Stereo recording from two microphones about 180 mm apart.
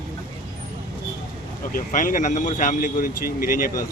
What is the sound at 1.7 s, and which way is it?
Speech, 45° left (ahead or behind).